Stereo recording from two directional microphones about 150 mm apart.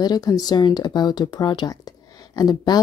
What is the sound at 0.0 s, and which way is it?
Speech, 25° left (ahead or behind).